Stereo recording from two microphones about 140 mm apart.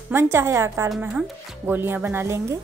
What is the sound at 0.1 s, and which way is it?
A woman's voice, 20° right (ahead or behind).